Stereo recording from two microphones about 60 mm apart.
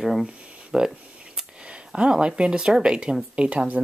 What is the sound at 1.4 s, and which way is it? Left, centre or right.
Speech, centre.